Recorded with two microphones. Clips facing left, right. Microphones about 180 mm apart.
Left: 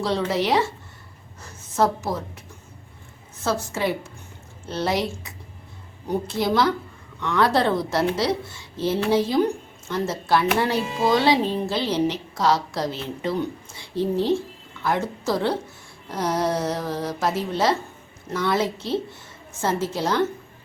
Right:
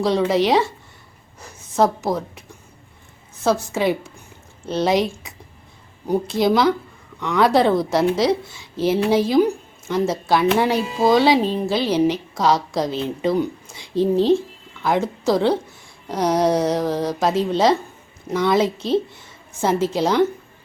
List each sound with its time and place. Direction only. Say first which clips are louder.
0.0 s a woman's voice: right 5 dB; 15° right (ahead or behind)
3.4 s a woman's voice: right 5 dB; 15° right (ahead or behind)